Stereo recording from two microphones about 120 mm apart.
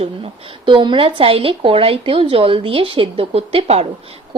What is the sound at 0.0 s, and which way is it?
Speech, 50° right (ahead or behind).